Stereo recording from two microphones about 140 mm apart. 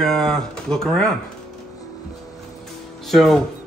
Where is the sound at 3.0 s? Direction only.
Centre (ahead or behind).